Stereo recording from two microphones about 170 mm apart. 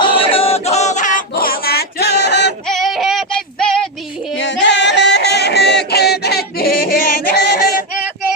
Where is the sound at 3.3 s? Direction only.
5° left (ahead or behind).